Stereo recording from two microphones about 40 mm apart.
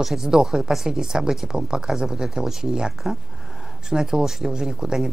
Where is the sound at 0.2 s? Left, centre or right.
Centre.